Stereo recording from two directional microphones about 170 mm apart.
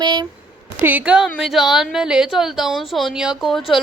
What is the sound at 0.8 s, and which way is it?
Speech, 10° right (ahead or behind).